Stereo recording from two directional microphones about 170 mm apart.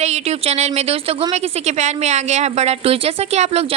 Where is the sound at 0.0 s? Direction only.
40° right (ahead or behind).